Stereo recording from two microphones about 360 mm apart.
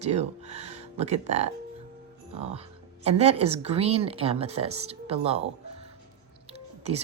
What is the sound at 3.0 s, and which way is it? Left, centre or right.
A woman's voice, centre.